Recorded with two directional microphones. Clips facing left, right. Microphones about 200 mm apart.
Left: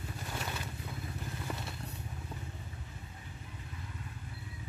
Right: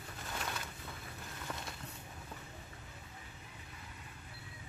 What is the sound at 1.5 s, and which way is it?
Vehicle, 15° left (ahead or behind).